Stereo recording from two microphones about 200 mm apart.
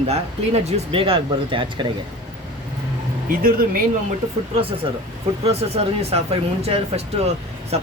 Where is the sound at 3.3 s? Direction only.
45° right (ahead or behind).